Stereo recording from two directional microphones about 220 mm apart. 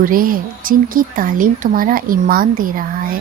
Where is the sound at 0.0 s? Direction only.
40° right (ahead or behind).